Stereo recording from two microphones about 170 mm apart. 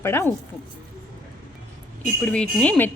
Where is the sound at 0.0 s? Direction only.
15° left (ahead or behind).